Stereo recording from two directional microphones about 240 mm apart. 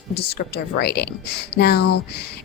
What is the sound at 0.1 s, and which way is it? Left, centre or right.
Speech, left.